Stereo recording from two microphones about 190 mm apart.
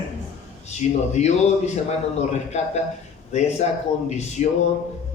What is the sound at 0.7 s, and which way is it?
A man's voice, 35° left (ahead or behind).